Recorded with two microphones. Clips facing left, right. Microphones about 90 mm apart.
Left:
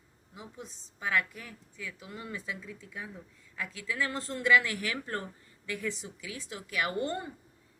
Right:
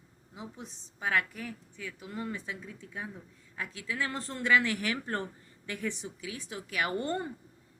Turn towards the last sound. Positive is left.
turn(degrees=-35)  # may be behind; listen again after turning